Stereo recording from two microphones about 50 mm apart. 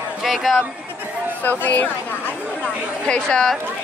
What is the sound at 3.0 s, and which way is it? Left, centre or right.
Speech, centre.